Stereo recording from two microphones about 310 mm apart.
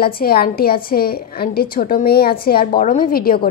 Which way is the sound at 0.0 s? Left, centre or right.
Left.